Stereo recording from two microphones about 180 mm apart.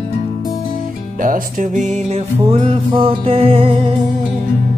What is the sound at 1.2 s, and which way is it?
Music, 45° right (ahead or behind).